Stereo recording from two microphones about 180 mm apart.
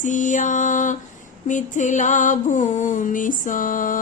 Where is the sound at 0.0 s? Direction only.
45° left (ahead or behind).